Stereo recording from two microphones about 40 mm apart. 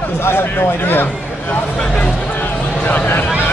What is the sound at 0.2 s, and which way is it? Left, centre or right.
Speech, left.